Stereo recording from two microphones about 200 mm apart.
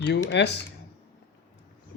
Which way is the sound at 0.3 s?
60° left (ahead or behind).